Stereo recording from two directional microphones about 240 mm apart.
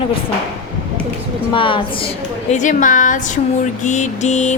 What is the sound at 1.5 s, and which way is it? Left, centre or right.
A woman's voice, left.